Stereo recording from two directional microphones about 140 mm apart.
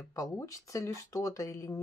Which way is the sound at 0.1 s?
25° left (ahead or behind).